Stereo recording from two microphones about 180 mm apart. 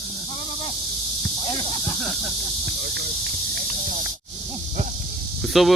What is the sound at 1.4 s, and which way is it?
Snake, 30° left (ahead or behind).